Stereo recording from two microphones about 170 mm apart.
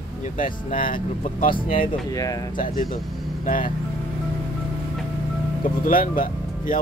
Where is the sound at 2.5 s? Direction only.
50° left (ahead or behind).